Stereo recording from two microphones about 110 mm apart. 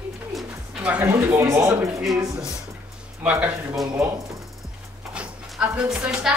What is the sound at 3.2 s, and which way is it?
Speech, 10° right (ahead or behind).